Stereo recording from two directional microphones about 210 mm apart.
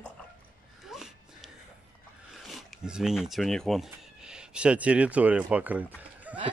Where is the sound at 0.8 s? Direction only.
Centre (ahead or behind).